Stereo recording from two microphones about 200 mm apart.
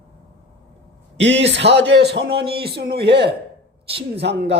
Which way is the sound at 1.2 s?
65° right (ahead or behind).